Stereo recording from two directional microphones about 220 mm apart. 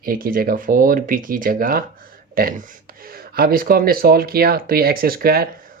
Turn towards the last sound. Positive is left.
turn(degrees=-40)  # may be behind; listen again after turning